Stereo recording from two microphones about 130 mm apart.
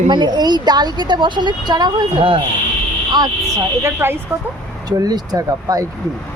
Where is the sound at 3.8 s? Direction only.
20° right (ahead or behind).